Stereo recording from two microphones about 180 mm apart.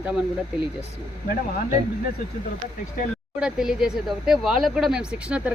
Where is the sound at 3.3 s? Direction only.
5° right (ahead or behind).